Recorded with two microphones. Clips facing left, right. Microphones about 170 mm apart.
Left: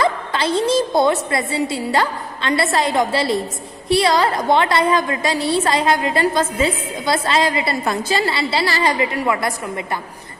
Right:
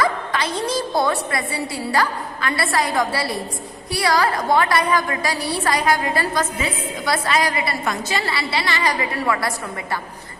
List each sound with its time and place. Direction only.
0.0 s a woman's voice: 30° left (ahead or behind)
8.6 s a woman's voice: 35° left (ahead or behind)
8.9 s a woman's voice: 20° left (ahead or behind)